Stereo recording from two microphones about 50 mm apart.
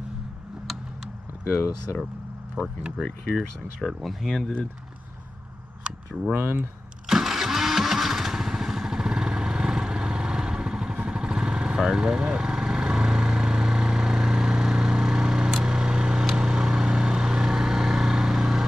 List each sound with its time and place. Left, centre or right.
2.6 s speech: right
3.0 s speech: centre
5.9 s a sound: right
6.3 s speech: right
7.1 s motorcycle: centre
11.1 s vehicle: centre